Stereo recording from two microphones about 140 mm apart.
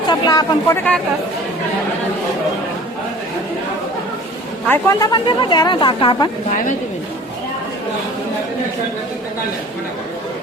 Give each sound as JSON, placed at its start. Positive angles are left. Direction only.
{"t": 0.1, "sound": "speech", "side_deg": 25}
{"t": 4.7, "sound": "speech", "side_deg": 25}